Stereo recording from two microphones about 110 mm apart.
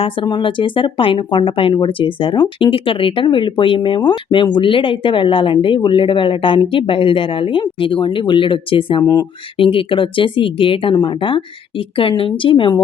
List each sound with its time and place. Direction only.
0.0 s speech: 50° left (ahead or behind)
10.9 s speech: 45° left (ahead or behind)